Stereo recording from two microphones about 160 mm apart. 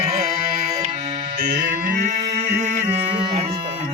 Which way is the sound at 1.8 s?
55° right (ahead or behind).